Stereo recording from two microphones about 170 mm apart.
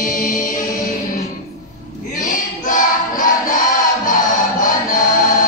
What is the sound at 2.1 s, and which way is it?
Choir, 50° left (ahead or behind).